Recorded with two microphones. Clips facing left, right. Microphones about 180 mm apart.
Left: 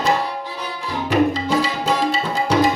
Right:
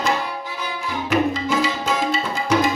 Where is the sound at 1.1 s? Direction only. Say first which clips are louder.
Left 2 dB; 35° left (ahead or behind).